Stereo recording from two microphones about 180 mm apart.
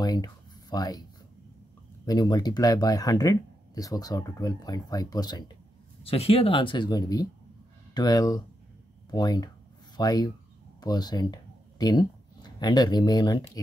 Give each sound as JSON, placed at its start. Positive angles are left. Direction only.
{"t": 0.0, "sound": "a sound", "side_deg": 20}
{"t": 2.0, "sound": "speech", "side_deg": 20}
{"t": 6.0, "sound": "speech", "side_deg": 35}